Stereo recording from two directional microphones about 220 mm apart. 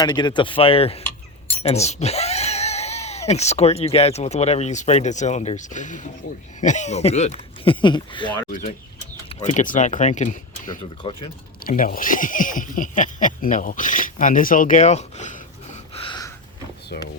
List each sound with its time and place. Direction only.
0.0 s speech: 20° left (ahead or behind)
8.4 s speech: 35° left (ahead or behind)
11.0 s speech: 25° left (ahead or behind)
11.6 s speech: 40° left (ahead or behind); by 16.3 s 20° left (ahead or behind)
16.9 s speech: 45° left (ahead or behind)